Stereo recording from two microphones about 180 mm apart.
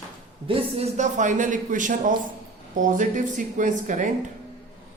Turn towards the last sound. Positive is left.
turn(degrees=-45)  # may be behind; listen again after turning